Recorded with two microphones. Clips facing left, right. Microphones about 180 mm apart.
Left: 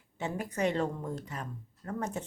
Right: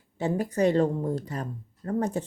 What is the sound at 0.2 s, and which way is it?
Speech, 35° right (ahead or behind).